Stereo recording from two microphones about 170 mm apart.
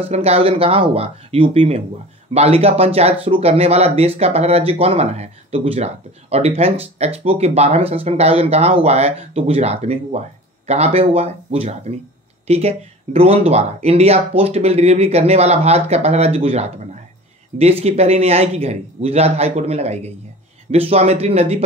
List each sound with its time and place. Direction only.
0.0 s speech: 35° right (ahead or behind)